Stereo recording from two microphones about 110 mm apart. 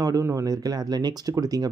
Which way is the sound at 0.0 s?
30° right (ahead or behind).